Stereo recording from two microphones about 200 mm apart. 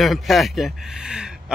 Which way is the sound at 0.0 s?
Centre (ahead or behind).